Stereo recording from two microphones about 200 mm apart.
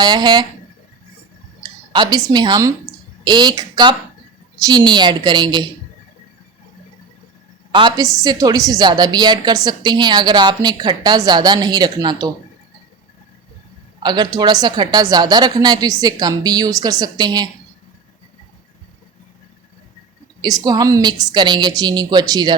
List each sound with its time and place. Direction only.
0.0 s a woman's voice: 20° right (ahead or behind)
1.9 s a woman's voice: 20° right (ahead or behind)
7.7 s a woman's voice: 25° right (ahead or behind)
14.0 s a woman's voice: 20° right (ahead or behind)
20.4 s a woman's voice: 20° right (ahead or behind)